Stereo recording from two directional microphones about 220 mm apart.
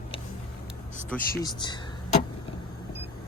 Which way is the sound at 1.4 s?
20° left (ahead or behind).